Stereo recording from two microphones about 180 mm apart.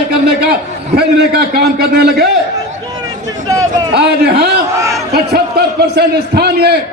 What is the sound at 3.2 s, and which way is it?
Speech, 20° right (ahead or behind).